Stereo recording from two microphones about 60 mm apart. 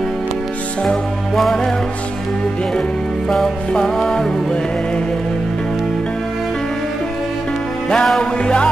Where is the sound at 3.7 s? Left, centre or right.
Centre.